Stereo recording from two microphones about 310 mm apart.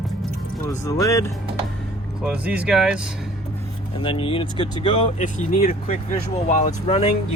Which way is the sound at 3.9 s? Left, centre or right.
Centre.